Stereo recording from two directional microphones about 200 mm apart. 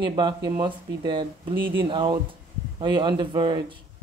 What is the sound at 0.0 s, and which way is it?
Speech, 25° right (ahead or behind).